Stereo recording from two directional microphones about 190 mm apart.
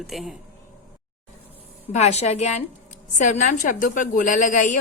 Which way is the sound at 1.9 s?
35° left (ahead or behind).